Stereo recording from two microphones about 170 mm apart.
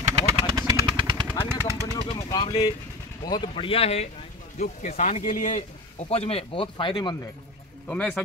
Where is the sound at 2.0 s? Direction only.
25° left (ahead or behind).